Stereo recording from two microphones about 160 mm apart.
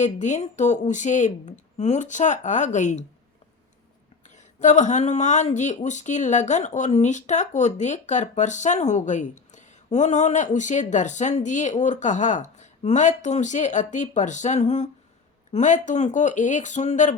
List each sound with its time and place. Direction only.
0.0 s speech: 50° left (ahead or behind)
4.6 s speech: 50° left (ahead or behind)